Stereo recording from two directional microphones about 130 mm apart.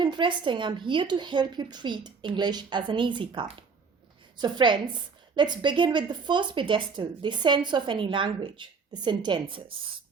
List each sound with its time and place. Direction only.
0.0 s speech: 35° right (ahead or behind)